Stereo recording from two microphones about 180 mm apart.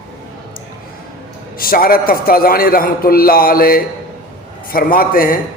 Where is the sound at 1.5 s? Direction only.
55° left (ahead or behind).